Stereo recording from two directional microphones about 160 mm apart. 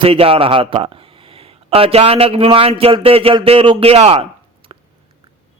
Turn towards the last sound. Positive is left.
turn(degrees=-40)  # may be behind; listen again after turning